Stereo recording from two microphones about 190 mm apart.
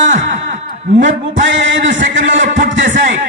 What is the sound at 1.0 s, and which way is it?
Speech, 75° right (ahead or behind).